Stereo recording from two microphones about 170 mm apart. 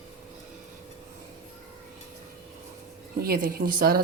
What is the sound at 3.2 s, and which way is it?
Speech, 60° right (ahead or behind).